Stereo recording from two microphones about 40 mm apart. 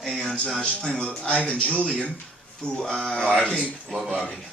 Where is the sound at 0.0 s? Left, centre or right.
Centre.